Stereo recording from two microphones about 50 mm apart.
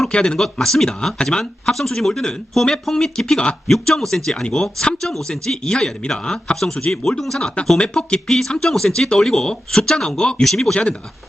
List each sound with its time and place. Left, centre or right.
0.1 s speech: centre
0.5 s speech: centre